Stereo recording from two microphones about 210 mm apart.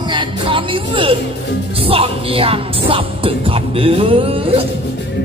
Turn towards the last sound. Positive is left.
turn(degrees=-25)  # may be behind; listen again after turning